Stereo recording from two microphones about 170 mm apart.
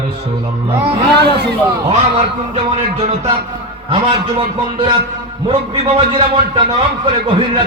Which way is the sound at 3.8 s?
30° right (ahead or behind).